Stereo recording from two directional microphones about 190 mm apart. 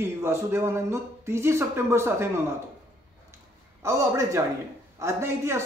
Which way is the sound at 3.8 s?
15° right (ahead or behind).